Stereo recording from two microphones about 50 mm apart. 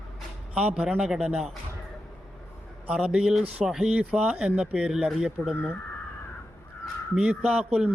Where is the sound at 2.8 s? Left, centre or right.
Right.